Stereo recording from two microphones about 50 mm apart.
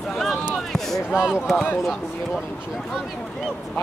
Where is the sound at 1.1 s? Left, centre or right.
Centre.